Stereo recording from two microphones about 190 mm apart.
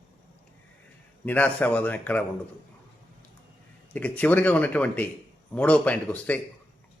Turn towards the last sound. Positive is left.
turn(degrees=5)  # may be behind; listen again after turning